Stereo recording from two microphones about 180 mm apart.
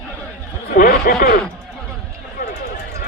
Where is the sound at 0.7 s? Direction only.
50° left (ahead or behind).